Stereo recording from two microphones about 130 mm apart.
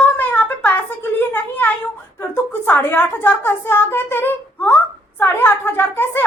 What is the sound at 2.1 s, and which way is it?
A woman's voice, 15° left (ahead or behind).